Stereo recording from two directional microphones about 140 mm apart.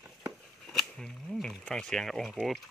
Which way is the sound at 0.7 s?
Centre (ahead or behind).